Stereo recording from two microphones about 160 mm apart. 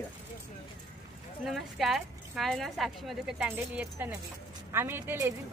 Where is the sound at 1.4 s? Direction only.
Centre (ahead or behind).